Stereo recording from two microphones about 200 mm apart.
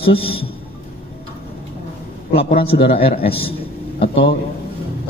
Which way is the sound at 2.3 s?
25° left (ahead or behind).